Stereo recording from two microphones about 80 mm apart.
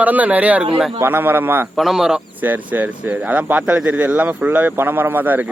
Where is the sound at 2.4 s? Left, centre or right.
Right.